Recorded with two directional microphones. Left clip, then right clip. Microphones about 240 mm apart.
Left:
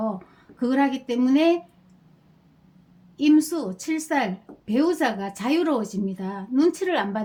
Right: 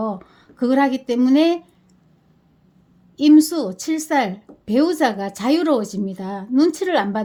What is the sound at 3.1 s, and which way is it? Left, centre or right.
Speech, right.